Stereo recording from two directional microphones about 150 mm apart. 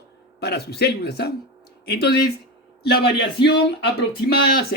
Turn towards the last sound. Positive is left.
turn(degrees=90)